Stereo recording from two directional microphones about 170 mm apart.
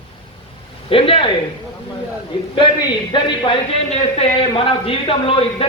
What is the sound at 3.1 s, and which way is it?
A man's voice, 30° left (ahead or behind).